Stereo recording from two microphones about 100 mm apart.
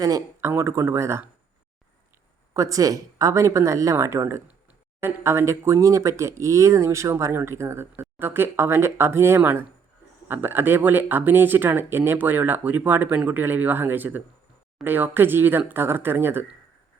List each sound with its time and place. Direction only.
0.0 s speech: 35° right (ahead or behind)
2.5 s speech: 35° right (ahead or behind)